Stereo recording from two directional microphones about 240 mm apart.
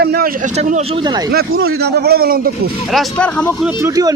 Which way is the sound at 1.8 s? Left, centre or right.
Right.